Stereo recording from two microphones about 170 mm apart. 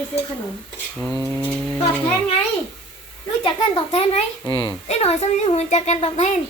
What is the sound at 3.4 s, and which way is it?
A child's voice, 35° left (ahead or behind).